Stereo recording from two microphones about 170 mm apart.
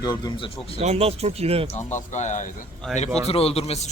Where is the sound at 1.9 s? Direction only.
45° left (ahead or behind).